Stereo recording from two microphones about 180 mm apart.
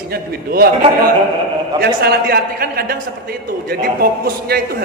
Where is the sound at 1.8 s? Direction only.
60° right (ahead or behind).